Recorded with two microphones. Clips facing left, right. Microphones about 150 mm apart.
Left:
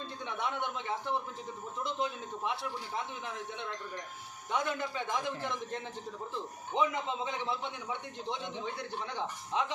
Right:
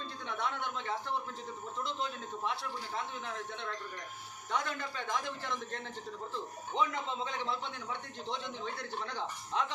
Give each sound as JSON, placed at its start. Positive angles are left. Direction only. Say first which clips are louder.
{"t": 0.3, "sound": "a man's voice", "louder": "left 1 dB", "side_deg": 20}
{"t": 9.1, "sound": "a man's voice", "louder": "left 2 dB", "side_deg": 15}